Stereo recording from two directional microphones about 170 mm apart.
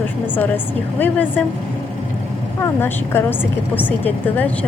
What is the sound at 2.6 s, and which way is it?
A woman's voice, 15° left (ahead or behind).